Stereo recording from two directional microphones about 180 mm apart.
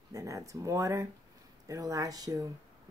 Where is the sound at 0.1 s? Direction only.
20° right (ahead or behind).